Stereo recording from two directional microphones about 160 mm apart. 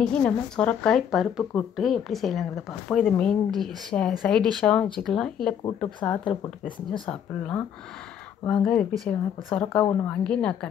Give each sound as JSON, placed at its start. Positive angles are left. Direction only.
{"t": 0.0, "sound": "speech", "side_deg": 5}